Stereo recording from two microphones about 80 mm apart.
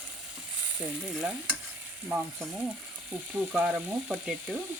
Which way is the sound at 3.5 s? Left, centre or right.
Centre.